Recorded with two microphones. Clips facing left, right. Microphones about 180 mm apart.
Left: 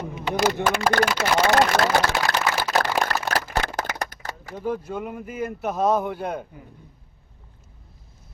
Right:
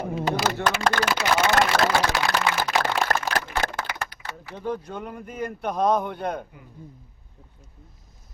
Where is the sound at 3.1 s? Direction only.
45° right (ahead or behind).